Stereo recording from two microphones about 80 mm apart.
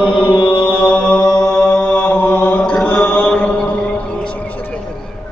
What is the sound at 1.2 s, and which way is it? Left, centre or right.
Chant, left.